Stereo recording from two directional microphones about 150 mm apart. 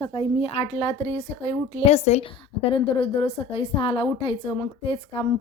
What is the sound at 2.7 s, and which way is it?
A woman's voice, 35° left (ahead or behind).